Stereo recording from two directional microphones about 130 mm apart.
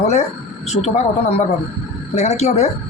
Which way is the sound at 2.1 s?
55° left (ahead or behind).